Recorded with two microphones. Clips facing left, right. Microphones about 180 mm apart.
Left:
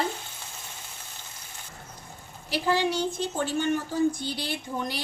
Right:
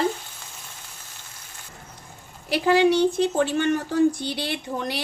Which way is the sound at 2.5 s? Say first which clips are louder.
Right 7 dB; 65° right (ahead or behind).